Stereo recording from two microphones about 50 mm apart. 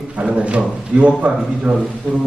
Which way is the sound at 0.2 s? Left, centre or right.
Right.